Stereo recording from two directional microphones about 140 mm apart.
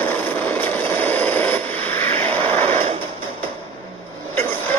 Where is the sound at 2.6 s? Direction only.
60° right (ahead or behind).